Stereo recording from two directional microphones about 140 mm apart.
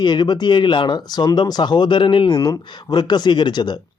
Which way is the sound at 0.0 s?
30° left (ahead or behind).